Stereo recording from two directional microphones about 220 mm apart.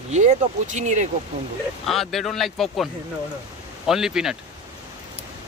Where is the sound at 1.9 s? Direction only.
Centre (ahead or behind).